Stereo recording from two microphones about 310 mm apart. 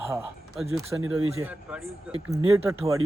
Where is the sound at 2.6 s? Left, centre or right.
Centre.